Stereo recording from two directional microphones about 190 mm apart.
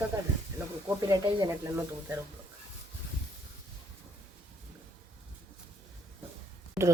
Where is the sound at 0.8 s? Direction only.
15° right (ahead or behind).